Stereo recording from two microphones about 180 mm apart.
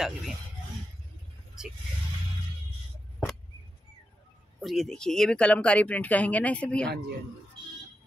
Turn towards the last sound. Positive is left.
turn(degrees=5)  # may be behind; listen again after turning